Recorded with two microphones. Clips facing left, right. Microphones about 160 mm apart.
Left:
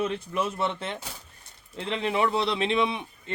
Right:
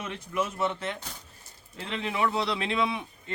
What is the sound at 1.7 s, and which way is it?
A man's voice, 30° left (ahead or behind).